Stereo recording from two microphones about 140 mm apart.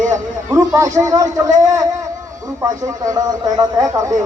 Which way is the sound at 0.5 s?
25° right (ahead or behind).